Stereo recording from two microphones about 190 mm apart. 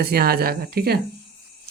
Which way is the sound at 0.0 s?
55° right (ahead or behind).